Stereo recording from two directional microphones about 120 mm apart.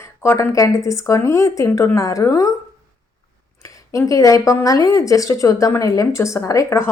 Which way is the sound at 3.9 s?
25° left (ahead or behind).